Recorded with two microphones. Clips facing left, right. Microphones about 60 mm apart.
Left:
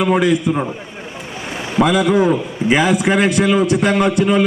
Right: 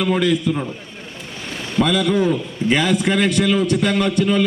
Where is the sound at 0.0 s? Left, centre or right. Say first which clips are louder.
Left 3 dB; centre.